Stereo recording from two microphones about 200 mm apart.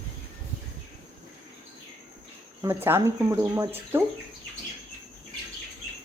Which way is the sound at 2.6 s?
10° right (ahead or behind).